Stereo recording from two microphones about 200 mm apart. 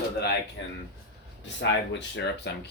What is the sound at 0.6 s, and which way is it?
Speech, 70° left (ahead or behind).